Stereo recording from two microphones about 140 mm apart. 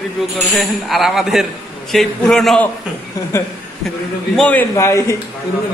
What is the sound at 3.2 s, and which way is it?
Speech, 25° left (ahead or behind).